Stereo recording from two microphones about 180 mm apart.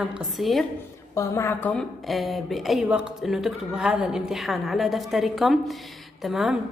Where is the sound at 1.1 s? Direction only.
15° left (ahead or behind).